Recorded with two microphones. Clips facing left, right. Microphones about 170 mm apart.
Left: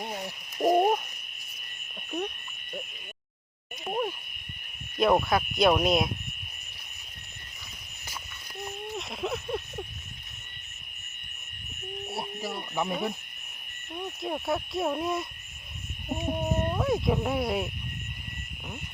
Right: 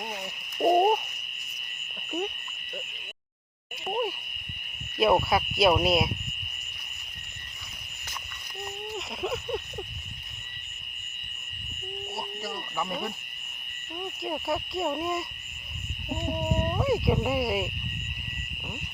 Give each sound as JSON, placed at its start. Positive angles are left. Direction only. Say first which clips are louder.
{"t": 0.7, "sound": "owl", "louder": "right 1 dB", "side_deg": -5}
{"t": 2.0, "sound": "insect", "louder": "right 1 dB", "side_deg": -10}
{"t": 3.8, "sound": "a sound", "louder": "right 1 dB", "side_deg": -5}
{"t": 4.9, "sound": "cricket", "louder": "even", "side_deg": -5}
{"t": 8.6, "sound": "a sound", "louder": "even", "side_deg": 0}
{"t": 12.5, "sound": "owl", "louder": "left 3 dB", "side_deg": 20}
{"t": 12.9, "sound": "speech", "louder": "left 3 dB", "side_deg": 5}
{"t": 13.9, "sound": "cricket", "louder": "even", "side_deg": 0}
{"t": 16.0, "sound": "speech", "louder": "even", "side_deg": 0}